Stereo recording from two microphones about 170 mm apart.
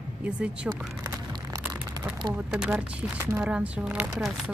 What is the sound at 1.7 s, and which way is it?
Crumpling, 25° right (ahead or behind).